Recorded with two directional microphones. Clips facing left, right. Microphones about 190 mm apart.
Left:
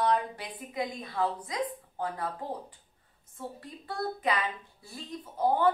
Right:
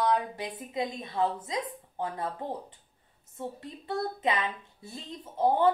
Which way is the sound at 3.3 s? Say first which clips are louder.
Right 3 dB; 25° right (ahead or behind).